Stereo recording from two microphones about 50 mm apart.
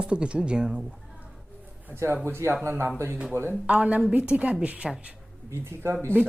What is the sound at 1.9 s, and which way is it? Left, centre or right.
Speech, right.